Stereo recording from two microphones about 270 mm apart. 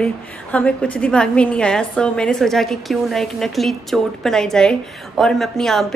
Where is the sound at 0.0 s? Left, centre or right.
Centre.